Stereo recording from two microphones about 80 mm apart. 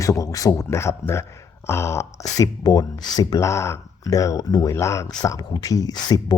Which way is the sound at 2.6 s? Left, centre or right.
Left.